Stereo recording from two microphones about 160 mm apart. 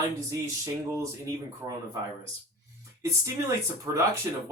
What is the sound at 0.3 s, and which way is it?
Speech, 20° right (ahead or behind).